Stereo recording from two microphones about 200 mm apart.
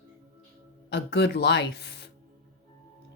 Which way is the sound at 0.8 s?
60° left (ahead or behind).